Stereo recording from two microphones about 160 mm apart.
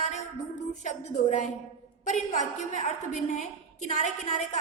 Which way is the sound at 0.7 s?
50° left (ahead or behind).